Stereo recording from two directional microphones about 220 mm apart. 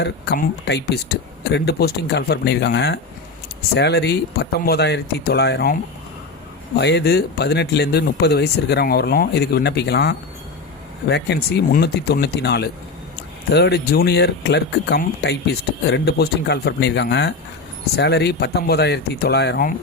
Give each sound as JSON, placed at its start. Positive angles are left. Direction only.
{"t": 0.0, "sound": "speech", "side_deg": 50}
{"t": 6.7, "sound": "speech", "side_deg": 50}